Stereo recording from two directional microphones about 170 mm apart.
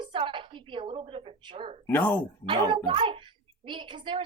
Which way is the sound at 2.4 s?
30° right (ahead or behind).